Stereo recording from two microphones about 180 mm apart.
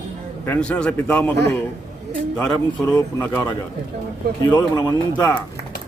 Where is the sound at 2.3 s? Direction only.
5° left (ahead or behind).